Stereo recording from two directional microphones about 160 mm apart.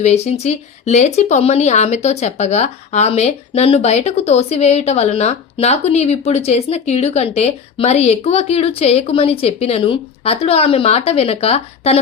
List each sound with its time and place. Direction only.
0.0 s speech: 45° left (ahead or behind)